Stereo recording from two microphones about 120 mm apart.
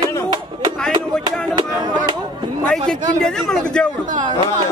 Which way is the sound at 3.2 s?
5° left (ahead or behind).